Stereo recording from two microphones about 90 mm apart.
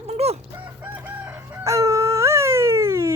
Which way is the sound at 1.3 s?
35° right (ahead or behind).